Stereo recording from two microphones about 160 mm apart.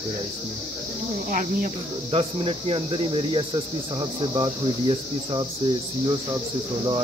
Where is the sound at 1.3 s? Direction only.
55° right (ahead or behind).